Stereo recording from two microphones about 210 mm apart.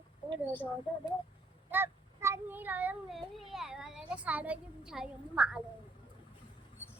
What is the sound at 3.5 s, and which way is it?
Speech, centre (ahead or behind).